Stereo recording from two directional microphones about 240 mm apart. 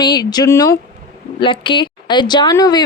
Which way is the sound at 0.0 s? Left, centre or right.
Centre.